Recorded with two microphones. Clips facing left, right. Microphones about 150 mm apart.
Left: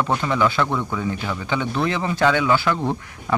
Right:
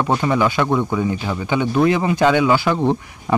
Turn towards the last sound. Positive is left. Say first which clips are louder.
# right 6 dB
turn(degrees=-20)  # may be behind; listen again after turning